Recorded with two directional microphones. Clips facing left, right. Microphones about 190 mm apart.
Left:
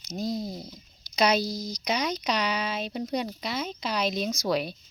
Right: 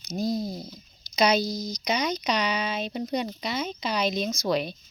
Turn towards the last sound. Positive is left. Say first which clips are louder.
# right 1 dB
turn(degrees=5)  # may be behind; listen again after turning